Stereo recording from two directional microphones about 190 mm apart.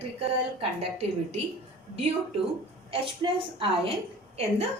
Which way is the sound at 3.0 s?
30° right (ahead or behind).